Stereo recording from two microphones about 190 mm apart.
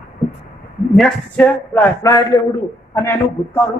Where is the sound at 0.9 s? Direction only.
5° left (ahead or behind).